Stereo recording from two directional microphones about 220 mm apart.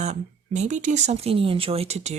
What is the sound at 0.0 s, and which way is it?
Speech, 30° right (ahead or behind).